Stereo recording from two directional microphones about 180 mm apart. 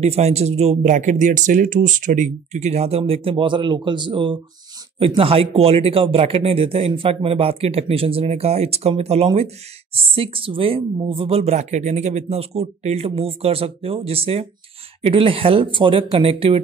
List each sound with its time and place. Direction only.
0.0 s speech: 35° right (ahead or behind)